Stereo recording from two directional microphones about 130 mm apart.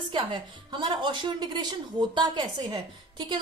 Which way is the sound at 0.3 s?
40° right (ahead or behind).